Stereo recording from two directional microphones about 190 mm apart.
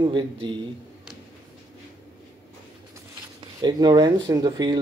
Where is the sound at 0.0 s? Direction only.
25° right (ahead or behind).